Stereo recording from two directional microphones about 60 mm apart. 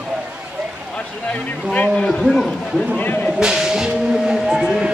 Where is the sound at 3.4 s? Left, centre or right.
Centre.